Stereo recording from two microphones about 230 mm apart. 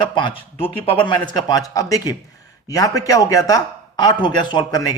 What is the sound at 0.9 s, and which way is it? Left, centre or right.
Speech, centre.